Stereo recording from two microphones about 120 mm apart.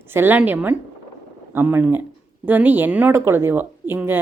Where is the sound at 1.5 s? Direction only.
15° right (ahead or behind).